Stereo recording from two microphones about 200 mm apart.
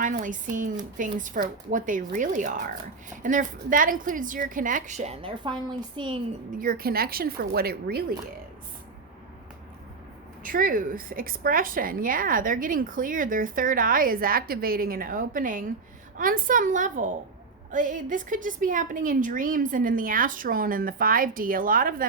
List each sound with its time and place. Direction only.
0.0 s a woman's voice: 40° right (ahead or behind); by 6.1 s 25° right (ahead or behind)
6.6 s a woman's voice: 45° right (ahead or behind)
10.4 s a woman's voice: 45° right (ahead or behind)